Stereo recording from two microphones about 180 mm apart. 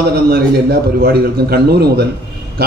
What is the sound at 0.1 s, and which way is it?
A man's voice, 60° right (ahead or behind).